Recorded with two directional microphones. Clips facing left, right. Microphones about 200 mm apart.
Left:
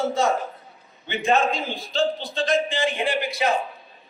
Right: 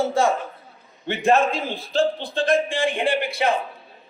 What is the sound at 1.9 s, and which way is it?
A man's voice, 60° right (ahead or behind).